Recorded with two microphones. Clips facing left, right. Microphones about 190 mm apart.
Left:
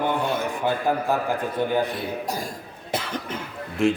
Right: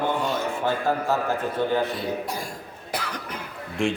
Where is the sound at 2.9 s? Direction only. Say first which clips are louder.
Left 3 dB; 25° left (ahead or behind).